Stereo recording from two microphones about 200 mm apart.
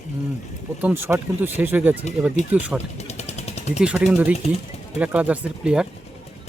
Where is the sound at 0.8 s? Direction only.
10° right (ahead or behind).